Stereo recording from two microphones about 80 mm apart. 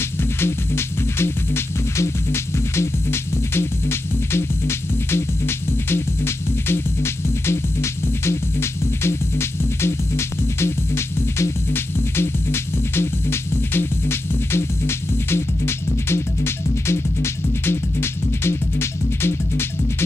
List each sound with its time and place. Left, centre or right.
0.2 s music: left